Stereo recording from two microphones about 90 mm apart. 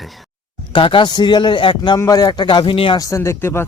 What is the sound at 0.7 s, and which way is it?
A man's voice, 65° left (ahead or behind).